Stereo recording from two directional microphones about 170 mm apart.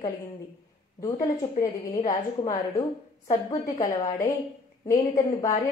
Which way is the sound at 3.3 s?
20° left (ahead or behind).